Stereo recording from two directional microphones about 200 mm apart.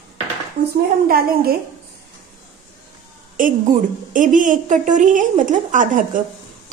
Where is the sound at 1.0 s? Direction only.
50° right (ahead or behind).